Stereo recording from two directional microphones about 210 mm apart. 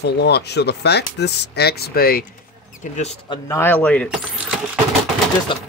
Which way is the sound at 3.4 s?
10° left (ahead or behind).